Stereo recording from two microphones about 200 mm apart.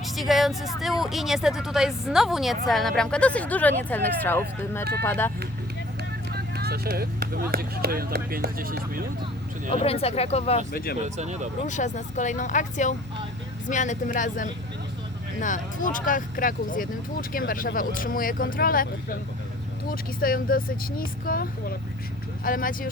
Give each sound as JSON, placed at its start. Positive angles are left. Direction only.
{"t": 0.0, "sound": "music", "side_deg": 0}
{"t": 1.0, "sound": "speech", "side_deg": 0}
{"t": 6.3, "sound": "speech", "side_deg": -50}
{"t": 9.6, "sound": "speech", "side_deg": 30}
{"t": 10.7, "sound": "speech", "side_deg": 50}
{"t": 11.2, "sound": "speech", "side_deg": -35}
{"t": 11.6, "sound": "speech", "side_deg": 35}
{"t": 19.9, "sound": "speech", "side_deg": 45}